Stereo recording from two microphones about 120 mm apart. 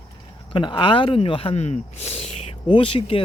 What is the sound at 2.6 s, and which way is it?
Speech, 45° left (ahead or behind).